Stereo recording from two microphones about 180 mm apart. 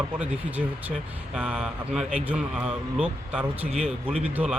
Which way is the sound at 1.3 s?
5° right (ahead or behind).